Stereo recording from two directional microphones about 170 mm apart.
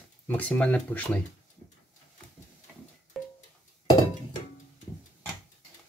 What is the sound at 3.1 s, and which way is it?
Music, centre (ahead or behind).